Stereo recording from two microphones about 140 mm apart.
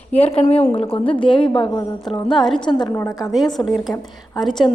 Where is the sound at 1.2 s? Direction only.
35° left (ahead or behind).